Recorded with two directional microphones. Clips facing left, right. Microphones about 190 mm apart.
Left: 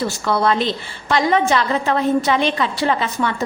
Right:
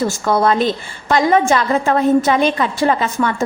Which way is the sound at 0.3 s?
45° right (ahead or behind).